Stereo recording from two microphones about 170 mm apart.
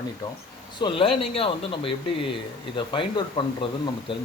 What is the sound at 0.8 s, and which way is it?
Speech, 30° left (ahead or behind).